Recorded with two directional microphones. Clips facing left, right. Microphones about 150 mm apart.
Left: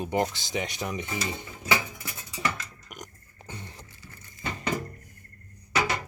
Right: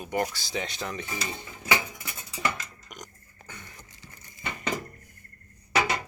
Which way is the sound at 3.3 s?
30° left (ahead or behind).